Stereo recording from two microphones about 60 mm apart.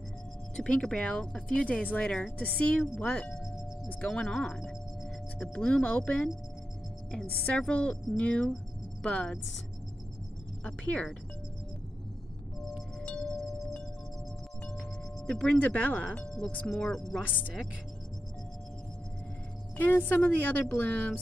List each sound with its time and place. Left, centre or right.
0.6 s speech: centre
7.4 s speech: centre
10.6 s speech: centre
15.2 s speech: centre
16.3 s speech: centre
19.8 s speech: left